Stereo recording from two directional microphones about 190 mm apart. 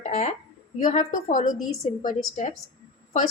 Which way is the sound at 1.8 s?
35° left (ahead or behind).